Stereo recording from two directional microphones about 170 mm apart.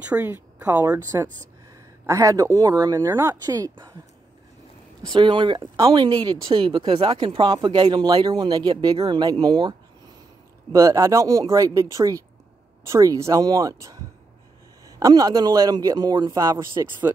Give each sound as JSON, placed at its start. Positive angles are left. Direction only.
{"t": 0.0, "sound": "a woman's voice", "side_deg": -10}
{"t": 5.1, "sound": "speech", "side_deg": -30}